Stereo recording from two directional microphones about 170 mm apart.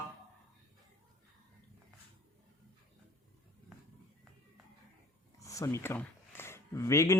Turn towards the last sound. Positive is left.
turn(degrees=15)  # may be behind; listen again after turning